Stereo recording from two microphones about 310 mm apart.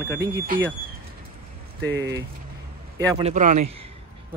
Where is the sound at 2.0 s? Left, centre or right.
Centre.